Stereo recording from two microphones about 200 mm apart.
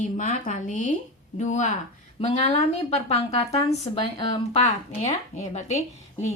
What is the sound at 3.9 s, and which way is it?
Speech, 20° left (ahead or behind).